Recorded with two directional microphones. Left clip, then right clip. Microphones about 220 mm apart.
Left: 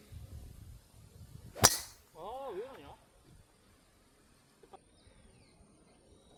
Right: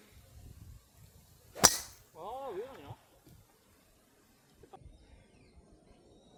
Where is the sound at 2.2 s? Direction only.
10° right (ahead or behind).